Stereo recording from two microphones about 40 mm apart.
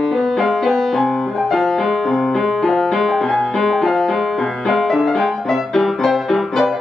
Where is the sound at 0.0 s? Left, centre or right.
Centre.